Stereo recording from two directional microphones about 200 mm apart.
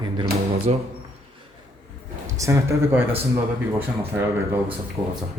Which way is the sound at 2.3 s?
15° right (ahead or behind).